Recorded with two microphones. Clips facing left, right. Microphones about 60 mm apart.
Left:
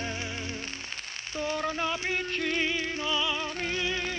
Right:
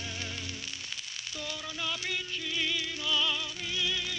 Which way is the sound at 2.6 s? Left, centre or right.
Left.